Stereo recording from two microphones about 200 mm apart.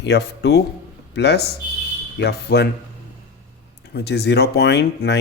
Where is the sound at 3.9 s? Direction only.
55° left (ahead or behind).